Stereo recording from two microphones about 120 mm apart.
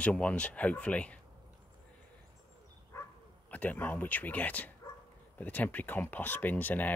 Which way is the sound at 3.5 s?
15° left (ahead or behind).